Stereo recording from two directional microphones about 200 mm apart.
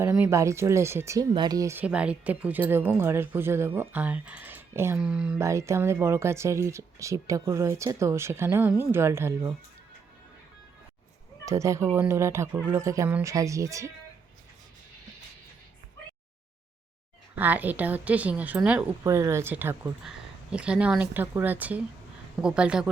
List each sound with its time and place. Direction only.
0.0 s speech: 10° right (ahead or behind)
11.4 s speech: 15° right (ahead or behind)
17.3 s speech: 10° right (ahead or behind)